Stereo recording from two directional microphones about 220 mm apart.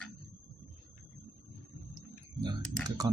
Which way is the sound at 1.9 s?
20° right (ahead or behind).